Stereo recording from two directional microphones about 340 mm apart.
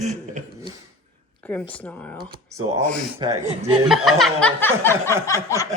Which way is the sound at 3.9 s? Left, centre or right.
Centre.